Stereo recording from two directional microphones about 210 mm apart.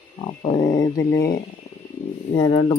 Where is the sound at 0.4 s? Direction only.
15° left (ahead or behind).